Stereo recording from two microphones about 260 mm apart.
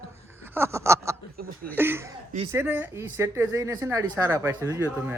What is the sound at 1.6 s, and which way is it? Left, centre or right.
Speech, centre.